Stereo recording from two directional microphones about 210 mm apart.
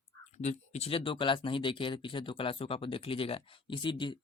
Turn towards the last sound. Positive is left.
turn(degrees=20)  # may be behind; listen again after turning